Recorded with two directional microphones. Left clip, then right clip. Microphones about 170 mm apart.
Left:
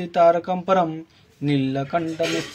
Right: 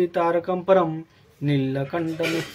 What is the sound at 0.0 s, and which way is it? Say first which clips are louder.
Speech: left 4 dB; 30° left (ahead or behind).